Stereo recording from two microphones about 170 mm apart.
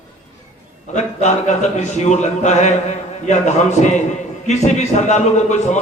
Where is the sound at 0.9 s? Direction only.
45° left (ahead or behind).